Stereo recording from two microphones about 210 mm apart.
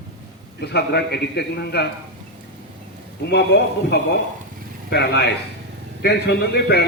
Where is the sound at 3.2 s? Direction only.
50° left (ahead or behind).